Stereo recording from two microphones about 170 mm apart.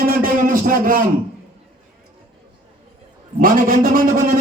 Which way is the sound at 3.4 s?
55° right (ahead or behind).